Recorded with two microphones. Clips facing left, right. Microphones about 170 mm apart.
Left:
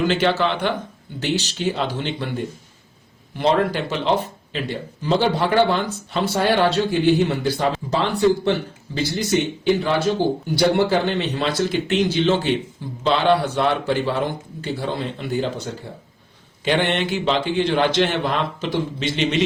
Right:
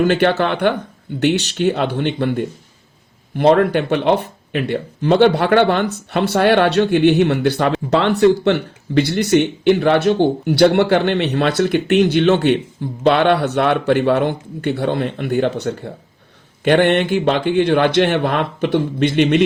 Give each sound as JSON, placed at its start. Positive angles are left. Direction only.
{"t": 0.0, "sound": "speech", "side_deg": -55}
{"t": 16.6, "sound": "speech", "side_deg": -55}